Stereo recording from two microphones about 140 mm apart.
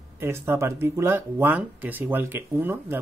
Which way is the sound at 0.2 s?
20° right (ahead or behind).